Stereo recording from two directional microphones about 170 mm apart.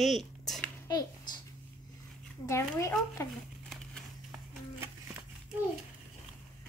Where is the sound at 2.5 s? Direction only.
15° left (ahead or behind).